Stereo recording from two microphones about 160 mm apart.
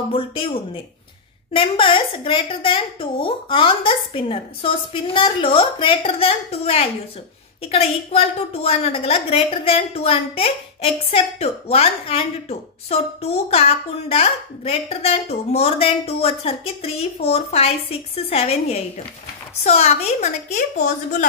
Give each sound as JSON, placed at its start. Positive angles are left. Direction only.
{"t": 1.5, "sound": "a woman's voice", "side_deg": 35}